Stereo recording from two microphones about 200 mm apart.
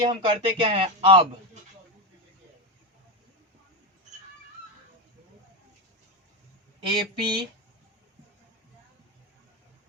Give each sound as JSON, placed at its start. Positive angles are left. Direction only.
{"t": 0.0, "sound": "speech", "side_deg": -25}
{"t": 6.8, "sound": "speech", "side_deg": -25}